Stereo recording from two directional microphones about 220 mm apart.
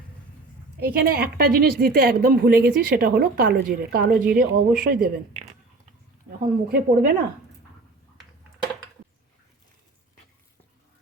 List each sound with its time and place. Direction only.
0.8 s a woman's voice: 45° right (ahead or behind)
6.7 s a woman's voice: 45° right (ahead or behind)